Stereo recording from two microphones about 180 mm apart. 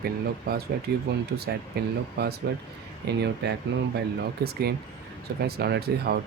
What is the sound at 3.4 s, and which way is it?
Speech, 65° right (ahead or behind).